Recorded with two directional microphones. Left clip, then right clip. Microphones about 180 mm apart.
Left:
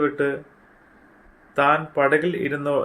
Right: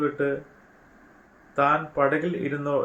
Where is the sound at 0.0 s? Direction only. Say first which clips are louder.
Left 3 dB; 55° left (ahead or behind).